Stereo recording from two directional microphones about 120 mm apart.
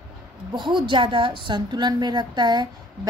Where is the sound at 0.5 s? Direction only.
40° right (ahead or behind).